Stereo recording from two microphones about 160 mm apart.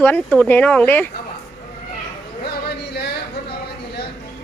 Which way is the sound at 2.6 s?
90° left.